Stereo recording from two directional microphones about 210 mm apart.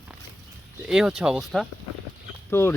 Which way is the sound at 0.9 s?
Centre (ahead or behind).